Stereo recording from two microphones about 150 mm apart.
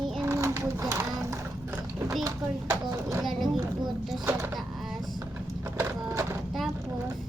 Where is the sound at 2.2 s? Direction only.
20° right (ahead or behind).